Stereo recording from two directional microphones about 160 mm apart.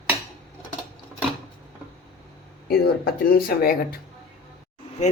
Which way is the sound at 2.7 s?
70° left (ahead or behind).